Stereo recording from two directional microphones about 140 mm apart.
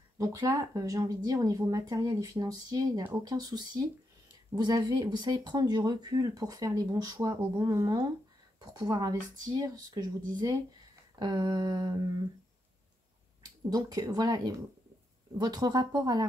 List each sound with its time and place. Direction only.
0.2 s speech: 25° right (ahead or behind)
3.0 s speech: 15° right (ahead or behind)
3.3 s speech: 30° right (ahead or behind)
13.7 s speech: 25° right (ahead or behind)